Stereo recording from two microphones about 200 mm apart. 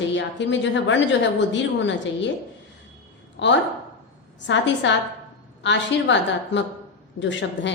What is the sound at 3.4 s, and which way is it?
A woman's voice, 65° left (ahead or behind).